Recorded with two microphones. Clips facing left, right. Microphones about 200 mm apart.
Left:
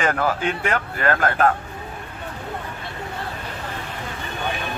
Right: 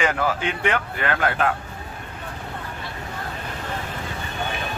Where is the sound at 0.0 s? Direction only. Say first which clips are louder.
Left 1 dB; 45° left (ahead or behind).